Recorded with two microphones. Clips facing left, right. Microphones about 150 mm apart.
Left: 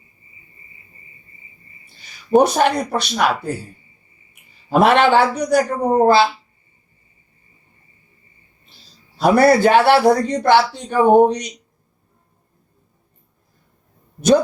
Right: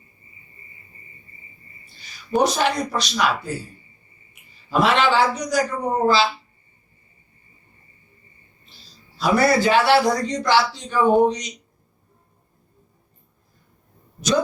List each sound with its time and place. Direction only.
2.3 s a man's voice: 55° left (ahead or behind)
4.7 s a man's voice: 55° left (ahead or behind)
9.1 s a man's voice: 55° left (ahead or behind)